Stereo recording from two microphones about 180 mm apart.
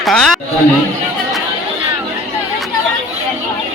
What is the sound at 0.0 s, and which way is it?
Speech, centre (ahead or behind).